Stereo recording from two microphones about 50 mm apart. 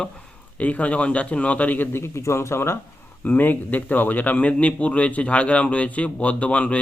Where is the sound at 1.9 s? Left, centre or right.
Left.